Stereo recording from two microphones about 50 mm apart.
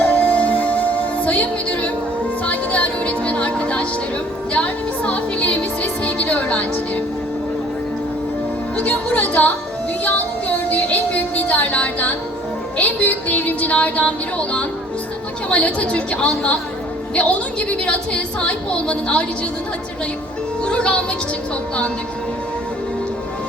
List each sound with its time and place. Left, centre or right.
0.0 s music: left
8.7 s music: left
10.7 s music: left
20.7 s music: left